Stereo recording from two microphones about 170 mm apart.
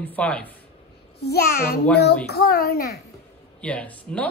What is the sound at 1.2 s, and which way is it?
A child's voice, 70° left (ahead or behind).